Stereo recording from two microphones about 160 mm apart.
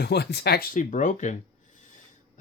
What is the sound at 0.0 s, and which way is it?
Speech, 90° left.